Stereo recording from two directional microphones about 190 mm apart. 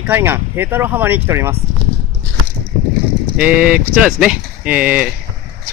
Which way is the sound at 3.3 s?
5° right (ahead or behind).